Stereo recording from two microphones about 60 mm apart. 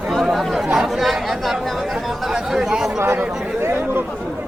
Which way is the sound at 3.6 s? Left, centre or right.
Right.